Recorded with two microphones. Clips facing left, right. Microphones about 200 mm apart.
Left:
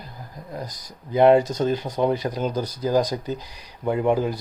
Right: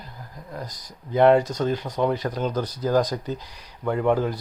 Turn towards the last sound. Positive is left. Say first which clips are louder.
# left 1 dB
turn(degrees=10)  # may be behind; listen again after turning